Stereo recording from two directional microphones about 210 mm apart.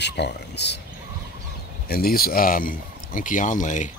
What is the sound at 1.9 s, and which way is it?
A man's voice, 45° left (ahead or behind).